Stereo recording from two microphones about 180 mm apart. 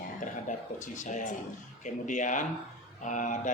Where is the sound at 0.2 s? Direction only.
45° left (ahead or behind).